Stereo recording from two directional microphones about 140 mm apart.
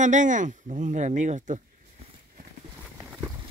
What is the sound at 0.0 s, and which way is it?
Speech, 60° right (ahead or behind).